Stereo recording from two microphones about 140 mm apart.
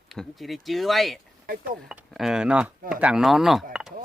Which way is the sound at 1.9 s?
5° right (ahead or behind).